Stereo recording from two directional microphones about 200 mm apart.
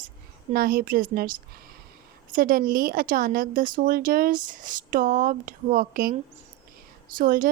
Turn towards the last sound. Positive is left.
turn(degrees=-45)  # may be behind; listen again after turning